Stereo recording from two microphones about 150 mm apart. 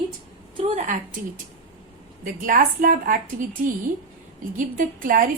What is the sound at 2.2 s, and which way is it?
Speech, 65° right (ahead or behind).